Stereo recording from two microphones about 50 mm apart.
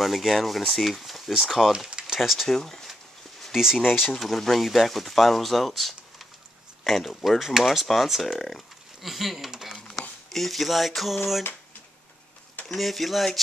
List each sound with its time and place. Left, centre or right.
0.0 s speech: centre
1.9 s a sound: centre
2.1 s speech: centre
2.4 s speech: centre
3.5 s speech: centre
4.1 s speech: centre
12.6 s speech: centre